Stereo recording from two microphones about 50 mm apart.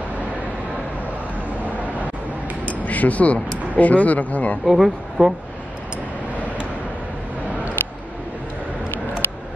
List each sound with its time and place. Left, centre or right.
2.8 s speech: left
4.6 s speech: centre